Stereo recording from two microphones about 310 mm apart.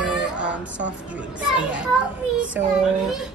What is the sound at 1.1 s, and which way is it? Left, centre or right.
A woman's voice, centre.